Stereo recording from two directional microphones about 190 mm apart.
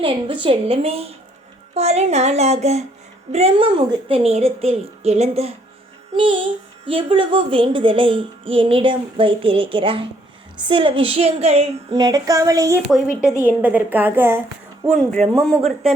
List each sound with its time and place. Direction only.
0.0 s a child's voice: 25° right (ahead or behind)
6.8 s a child's voice: 25° right (ahead or behind); by 14.4 s 10° right (ahead or behind)
14.8 s speech: 5° left (ahead or behind)